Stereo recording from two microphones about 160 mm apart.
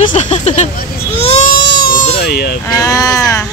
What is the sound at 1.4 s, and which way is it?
Baby cry, 75° left (ahead or behind).